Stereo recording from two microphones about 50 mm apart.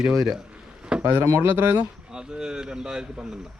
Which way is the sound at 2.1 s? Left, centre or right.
Centre.